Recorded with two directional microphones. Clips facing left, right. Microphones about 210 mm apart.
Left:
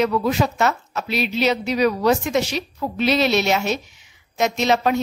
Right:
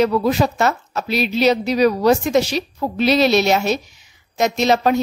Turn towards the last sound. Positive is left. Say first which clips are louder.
# right 3 dB
turn(degrees=-40)  # may be behind; listen again after turning